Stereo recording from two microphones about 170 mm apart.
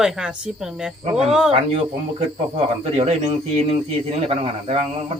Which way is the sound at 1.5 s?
35° right (ahead or behind).